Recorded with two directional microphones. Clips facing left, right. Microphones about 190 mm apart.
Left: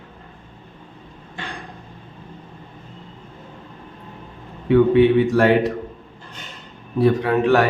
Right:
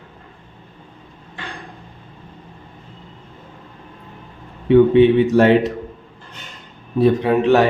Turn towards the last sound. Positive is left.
turn(degrees=-20)  # may be behind; listen again after turning